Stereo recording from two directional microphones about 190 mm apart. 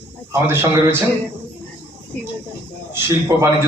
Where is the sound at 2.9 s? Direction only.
15° right (ahead or behind).